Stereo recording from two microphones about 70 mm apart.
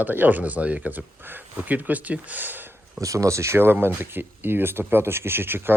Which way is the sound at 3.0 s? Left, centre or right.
Right.